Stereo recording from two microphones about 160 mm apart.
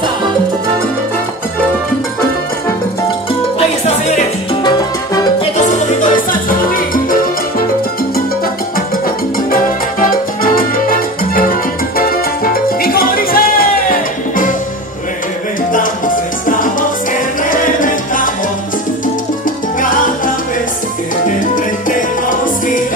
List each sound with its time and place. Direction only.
5.7 s music: 50° left (ahead or behind)
8.7 s music: 65° left (ahead or behind)
12.8 s music: 65° left (ahead or behind)
16.4 s music: 55° left (ahead or behind)
17.4 s salsa music: 55° left (ahead or behind)
22.4 s music: 55° left (ahead or behind)